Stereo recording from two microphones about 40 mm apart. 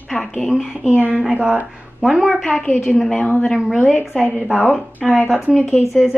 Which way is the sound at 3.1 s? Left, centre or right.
Left.